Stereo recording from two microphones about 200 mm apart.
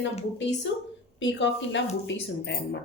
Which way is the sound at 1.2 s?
65° left (ahead or behind).